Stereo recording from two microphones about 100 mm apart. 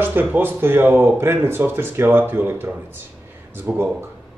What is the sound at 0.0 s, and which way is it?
Speech, 20° right (ahead or behind).